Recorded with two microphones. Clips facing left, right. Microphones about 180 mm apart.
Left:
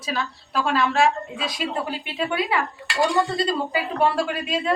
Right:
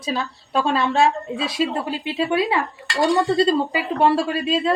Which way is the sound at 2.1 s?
30° right (ahead or behind).